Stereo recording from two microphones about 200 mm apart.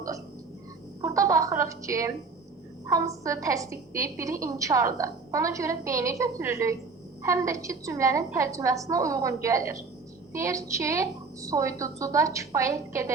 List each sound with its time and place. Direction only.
1.0 s a woman's voice: 15° right (ahead or behind)